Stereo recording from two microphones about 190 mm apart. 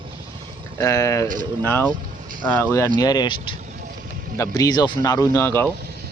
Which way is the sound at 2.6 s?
15° left (ahead or behind).